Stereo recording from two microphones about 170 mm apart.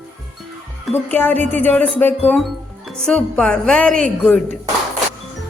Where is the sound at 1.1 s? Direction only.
10° left (ahead or behind).